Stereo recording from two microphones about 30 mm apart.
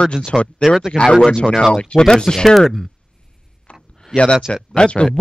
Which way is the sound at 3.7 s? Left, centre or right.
Left.